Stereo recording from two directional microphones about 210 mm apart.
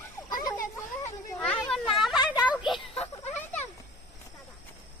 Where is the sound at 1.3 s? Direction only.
5° left (ahead or behind).